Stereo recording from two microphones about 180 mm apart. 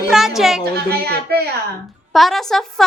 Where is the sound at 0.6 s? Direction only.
60° right (ahead or behind).